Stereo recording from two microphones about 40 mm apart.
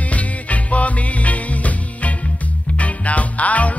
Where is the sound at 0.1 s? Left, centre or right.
Left.